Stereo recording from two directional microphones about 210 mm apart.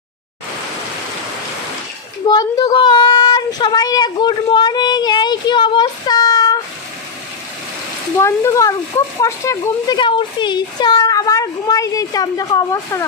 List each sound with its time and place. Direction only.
2.2 s speech: 20° left (ahead or behind)
8.2 s speech: 15° left (ahead or behind)